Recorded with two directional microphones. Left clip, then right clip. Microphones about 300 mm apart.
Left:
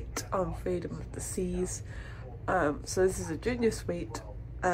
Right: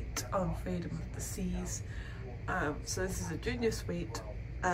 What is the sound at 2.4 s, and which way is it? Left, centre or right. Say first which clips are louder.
Speech: left 7 dB; centre.